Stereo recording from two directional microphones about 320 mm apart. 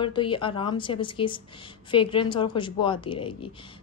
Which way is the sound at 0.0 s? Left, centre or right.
Centre.